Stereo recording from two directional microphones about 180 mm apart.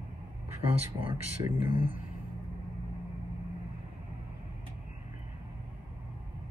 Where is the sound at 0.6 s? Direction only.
30° right (ahead or behind).